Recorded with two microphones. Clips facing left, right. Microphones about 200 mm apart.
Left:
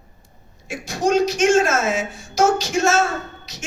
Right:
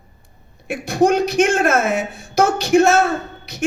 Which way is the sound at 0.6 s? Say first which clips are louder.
Right 5 dB; 60° right (ahead or behind).